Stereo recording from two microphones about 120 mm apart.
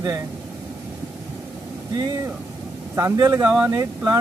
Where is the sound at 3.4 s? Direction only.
10° right (ahead or behind).